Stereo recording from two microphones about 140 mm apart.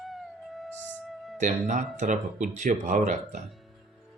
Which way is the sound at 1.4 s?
60° right (ahead or behind).